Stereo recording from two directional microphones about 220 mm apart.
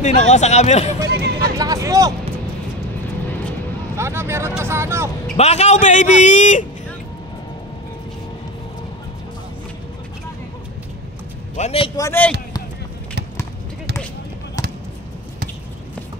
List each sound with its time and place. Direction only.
0.0 s a man's voice: 30° left (ahead or behind)
1.0 s hubbub: 45° right (ahead or behind)
1.6 s vehicle: 15° right (ahead or behind)
3.9 s speech: 10° right (ahead or behind)
5.4 s a man's voice: 30° left (ahead or behind)
11.5 s a man's voice: 30° left (ahead or behind)
12.0 s speech: 10° left (ahead or behind)